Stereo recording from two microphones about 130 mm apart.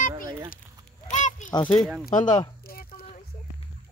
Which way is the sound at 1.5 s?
35° left (ahead or behind).